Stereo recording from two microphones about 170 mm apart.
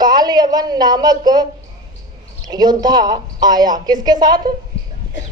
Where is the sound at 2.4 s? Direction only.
25° right (ahead or behind).